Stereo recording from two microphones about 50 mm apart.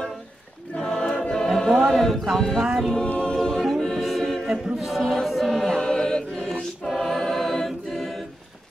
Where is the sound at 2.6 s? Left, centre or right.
Centre.